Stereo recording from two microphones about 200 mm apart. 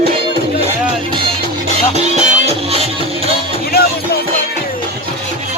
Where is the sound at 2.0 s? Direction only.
35° right (ahead or behind).